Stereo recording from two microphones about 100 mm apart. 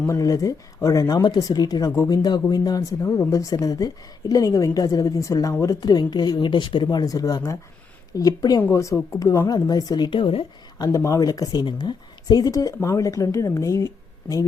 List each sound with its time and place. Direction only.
0.1 s speech: 35° left (ahead or behind); by 6.8 s 55° left (ahead or behind)
6.9 s a woman's voice: 40° left (ahead or behind); by 10.4 s 60° left (ahead or behind)
10.8 s speech: 30° left (ahead or behind)
11.6 s speech: 50° left (ahead or behind); by 14.4 s 35° left (ahead or behind)